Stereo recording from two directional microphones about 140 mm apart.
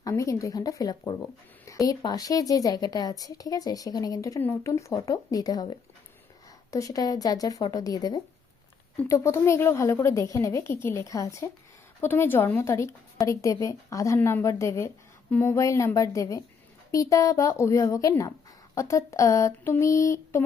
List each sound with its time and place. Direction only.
0.0 s a woman's voice: 25° left (ahead or behind)
6.7 s a woman's voice: 25° left (ahead or behind)